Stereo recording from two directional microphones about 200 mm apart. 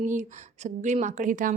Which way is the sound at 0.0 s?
40° right (ahead or behind).